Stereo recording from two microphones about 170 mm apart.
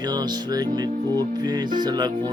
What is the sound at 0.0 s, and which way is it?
Music, 25° right (ahead or behind).